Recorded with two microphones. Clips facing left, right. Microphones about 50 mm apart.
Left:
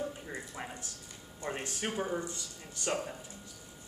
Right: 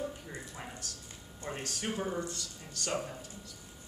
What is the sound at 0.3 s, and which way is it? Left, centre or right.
Speech, left.